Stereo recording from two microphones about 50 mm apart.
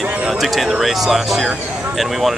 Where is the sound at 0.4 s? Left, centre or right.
Centre.